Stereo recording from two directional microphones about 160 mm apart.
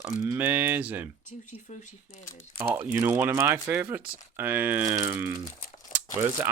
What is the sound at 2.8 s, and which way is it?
Speech, 15° right (ahead or behind).